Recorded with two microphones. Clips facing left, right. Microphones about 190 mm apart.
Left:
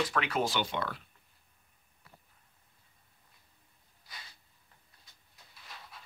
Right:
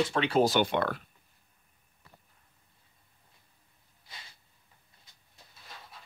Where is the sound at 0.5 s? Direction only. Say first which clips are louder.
Right 7 dB; 55° right (ahead or behind).